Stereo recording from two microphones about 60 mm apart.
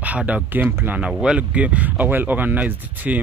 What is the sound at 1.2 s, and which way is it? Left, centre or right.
Speech, centre.